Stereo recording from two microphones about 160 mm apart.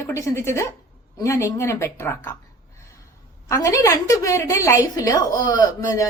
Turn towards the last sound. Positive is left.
turn(degrees=20)  # may be behind; listen again after turning